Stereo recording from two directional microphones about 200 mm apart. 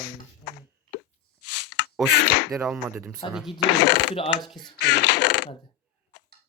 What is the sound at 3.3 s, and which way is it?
Speech, centre (ahead or behind).